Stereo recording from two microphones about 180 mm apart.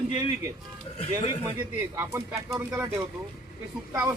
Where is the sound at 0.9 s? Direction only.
35° left (ahead or behind).